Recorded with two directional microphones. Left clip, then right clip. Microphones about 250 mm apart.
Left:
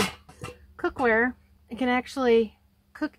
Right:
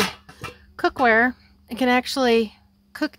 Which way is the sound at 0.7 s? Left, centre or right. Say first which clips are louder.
Right 6 dB; right.